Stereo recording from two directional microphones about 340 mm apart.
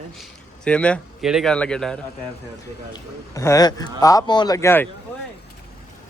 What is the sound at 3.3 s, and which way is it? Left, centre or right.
Speech, centre.